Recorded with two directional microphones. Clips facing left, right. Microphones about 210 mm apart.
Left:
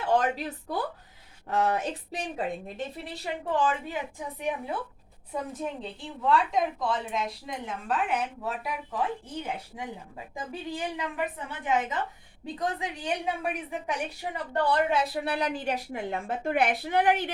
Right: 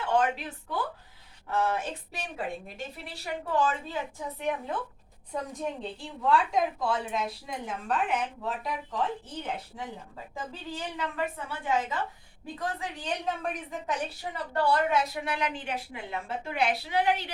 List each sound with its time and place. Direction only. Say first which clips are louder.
0.1 s speech: left 1 dB; 40° left (ahead or behind)
3.6 s a woman's voice: left 1 dB; 15° left (ahead or behind)
14.9 s a woman's voice: left 1 dB; 30° left (ahead or behind); by 17.3 s 50° left (ahead or behind)